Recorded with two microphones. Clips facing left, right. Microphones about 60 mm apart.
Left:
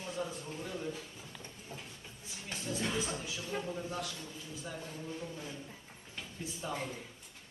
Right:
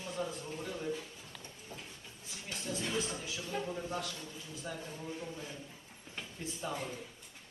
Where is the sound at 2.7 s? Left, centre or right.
Centre.